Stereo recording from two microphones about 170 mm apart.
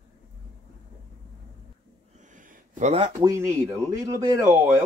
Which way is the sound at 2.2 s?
50° right (ahead or behind).